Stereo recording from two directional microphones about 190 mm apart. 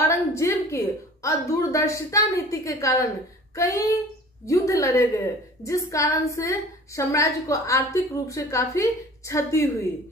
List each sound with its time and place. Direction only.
0.1 s a woman's voice: 15° left (ahead or behind)